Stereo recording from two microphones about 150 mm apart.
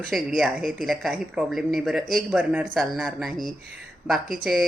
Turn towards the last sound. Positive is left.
turn(degrees=0)  # may be behind; listen again after turning